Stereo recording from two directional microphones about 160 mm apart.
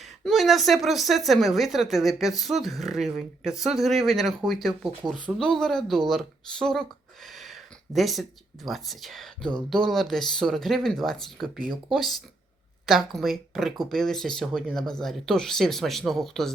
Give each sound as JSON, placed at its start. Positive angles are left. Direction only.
{"t": 0.0, "sound": "speech", "side_deg": 0}
{"t": 12.8, "sound": "a sound", "side_deg": 0}
{"t": 13.1, "sound": "speech", "side_deg": 0}